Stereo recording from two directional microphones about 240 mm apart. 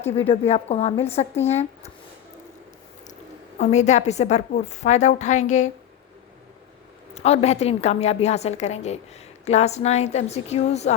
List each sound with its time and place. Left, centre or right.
0.2 s a woman's voice: left
3.6 s a woman's voice: left
7.1 s a woman's voice: left